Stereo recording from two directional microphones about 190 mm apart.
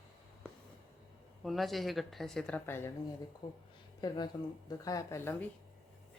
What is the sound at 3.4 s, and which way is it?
Speech, 25° left (ahead or behind).